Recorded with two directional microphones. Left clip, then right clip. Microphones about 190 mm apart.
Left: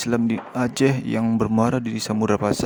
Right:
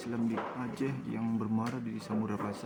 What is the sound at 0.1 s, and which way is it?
Speech, 60° left (ahead or behind).